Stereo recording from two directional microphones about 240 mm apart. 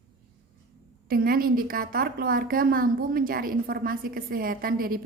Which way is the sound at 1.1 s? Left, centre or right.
Right.